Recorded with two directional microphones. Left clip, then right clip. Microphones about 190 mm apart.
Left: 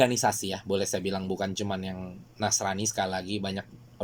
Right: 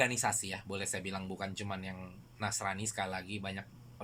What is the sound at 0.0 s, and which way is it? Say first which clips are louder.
Speech: left 8 dB; 30° left (ahead or behind).